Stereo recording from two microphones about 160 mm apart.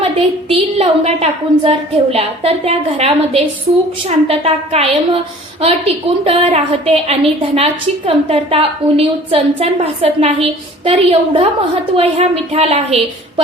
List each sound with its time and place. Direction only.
0.0 s a woman's voice: 40° right (ahead or behind)